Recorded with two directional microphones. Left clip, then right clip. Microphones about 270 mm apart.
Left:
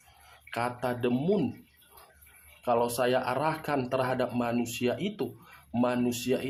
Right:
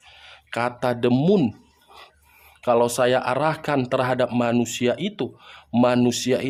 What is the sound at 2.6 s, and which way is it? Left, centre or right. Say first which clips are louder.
Speech: right 8 dB; right.